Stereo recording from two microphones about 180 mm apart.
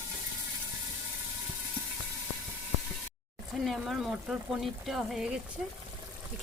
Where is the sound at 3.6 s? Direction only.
Centre (ahead or behind).